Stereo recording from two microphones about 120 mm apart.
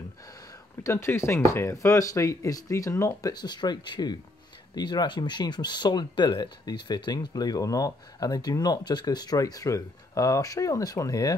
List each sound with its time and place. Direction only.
0.8 s speech: 20° left (ahead or behind)